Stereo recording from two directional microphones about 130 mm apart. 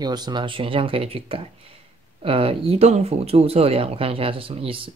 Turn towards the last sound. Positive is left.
turn(degrees=-45)  # may be behind; listen again after turning